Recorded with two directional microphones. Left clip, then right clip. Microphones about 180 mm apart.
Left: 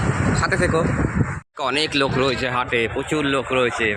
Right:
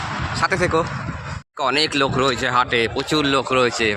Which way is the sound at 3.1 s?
15° right (ahead or behind).